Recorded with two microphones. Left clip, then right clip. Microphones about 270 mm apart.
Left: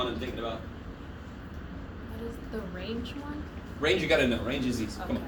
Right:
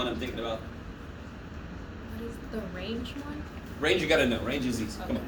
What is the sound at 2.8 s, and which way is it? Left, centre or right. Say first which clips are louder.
A woman's voice: right 1 dB; centre.